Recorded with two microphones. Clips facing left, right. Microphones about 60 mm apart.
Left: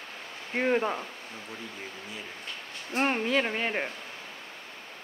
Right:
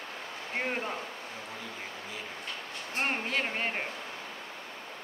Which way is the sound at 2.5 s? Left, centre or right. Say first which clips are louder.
Right 1 dB; right.